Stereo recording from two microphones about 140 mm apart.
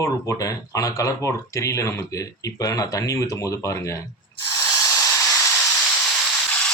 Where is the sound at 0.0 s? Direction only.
25° left (ahead or behind).